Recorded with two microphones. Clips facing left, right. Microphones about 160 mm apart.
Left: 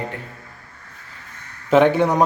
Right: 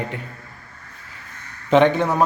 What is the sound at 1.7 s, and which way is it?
Speech, 5° left (ahead or behind).